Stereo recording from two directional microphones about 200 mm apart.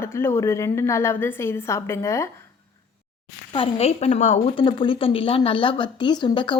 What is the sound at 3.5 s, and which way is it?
A woman's voice, 30° left (ahead or behind).